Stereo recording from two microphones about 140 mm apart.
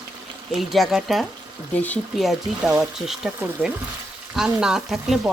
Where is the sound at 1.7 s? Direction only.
10° left (ahead or behind).